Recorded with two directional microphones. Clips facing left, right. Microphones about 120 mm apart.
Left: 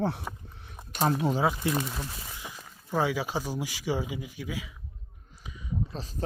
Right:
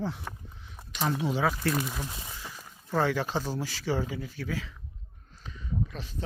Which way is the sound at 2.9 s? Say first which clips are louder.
Right 1 dB; 10° left (ahead or behind).